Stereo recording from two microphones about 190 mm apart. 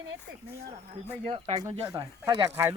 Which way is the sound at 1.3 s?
35° right (ahead or behind).